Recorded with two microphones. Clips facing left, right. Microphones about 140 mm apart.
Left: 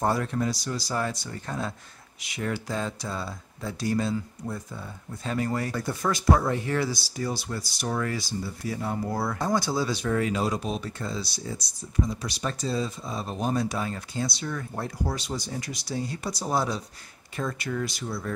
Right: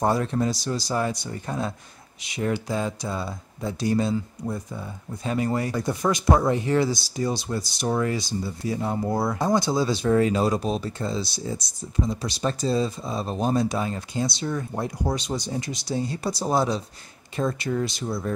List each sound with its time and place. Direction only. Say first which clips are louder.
0.0 s speech: right 3 dB; 25° right (ahead or behind)